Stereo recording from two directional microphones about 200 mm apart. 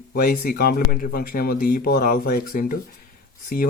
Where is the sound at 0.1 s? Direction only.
50° left (ahead or behind).